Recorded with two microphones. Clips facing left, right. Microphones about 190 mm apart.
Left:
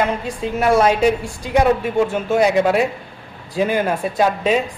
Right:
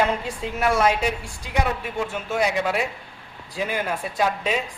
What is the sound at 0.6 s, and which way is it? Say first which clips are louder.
Speech: left 6 dB; 30° left (ahead or behind).